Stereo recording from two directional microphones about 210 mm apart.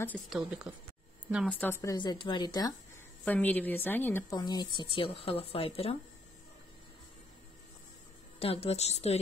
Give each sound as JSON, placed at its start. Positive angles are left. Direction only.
{"t": 0.0, "sound": "a woman's voice", "side_deg": 5}
{"t": 3.3, "sound": "a woman's voice", "side_deg": 10}
{"t": 8.4, "sound": "a woman's voice", "side_deg": 25}